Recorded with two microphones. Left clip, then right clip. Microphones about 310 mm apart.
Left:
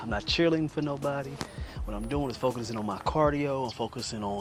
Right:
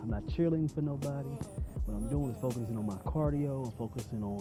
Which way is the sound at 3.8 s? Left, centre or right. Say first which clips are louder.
Left 9 dB; left.